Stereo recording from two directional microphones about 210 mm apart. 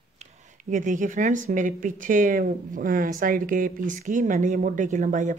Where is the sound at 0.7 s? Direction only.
35° right (ahead or behind).